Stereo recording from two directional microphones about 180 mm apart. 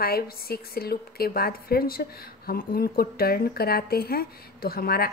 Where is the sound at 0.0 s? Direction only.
55° left (ahead or behind).